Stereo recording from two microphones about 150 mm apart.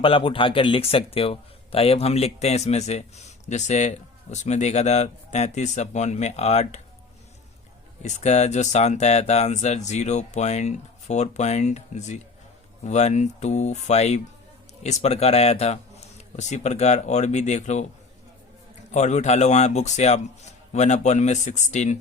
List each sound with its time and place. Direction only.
0.0 s speech: 35° left (ahead or behind)
8.0 s speech: 50° left (ahead or behind)
18.9 s speech: 50° left (ahead or behind)